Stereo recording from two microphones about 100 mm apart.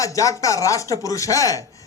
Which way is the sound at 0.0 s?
35° left (ahead or behind).